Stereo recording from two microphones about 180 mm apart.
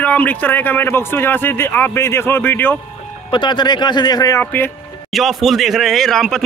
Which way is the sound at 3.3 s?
25° left (ahead or behind).